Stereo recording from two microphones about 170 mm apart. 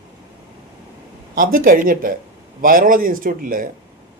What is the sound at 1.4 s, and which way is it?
Speech, 55° right (ahead or behind).